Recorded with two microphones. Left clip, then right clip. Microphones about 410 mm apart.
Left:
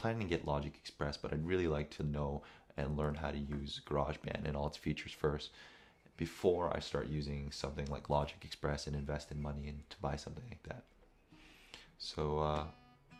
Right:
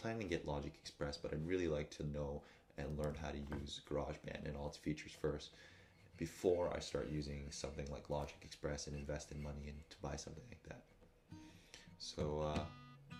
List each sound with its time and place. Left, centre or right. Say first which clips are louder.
0.0 s speech: left 5 dB; left